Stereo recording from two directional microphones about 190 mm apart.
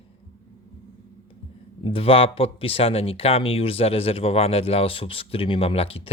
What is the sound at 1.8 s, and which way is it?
Speech, 30° left (ahead or behind).